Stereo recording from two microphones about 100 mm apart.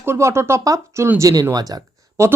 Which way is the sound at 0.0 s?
25° right (ahead or behind).